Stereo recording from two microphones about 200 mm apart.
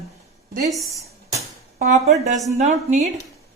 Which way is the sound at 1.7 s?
35° right (ahead or behind).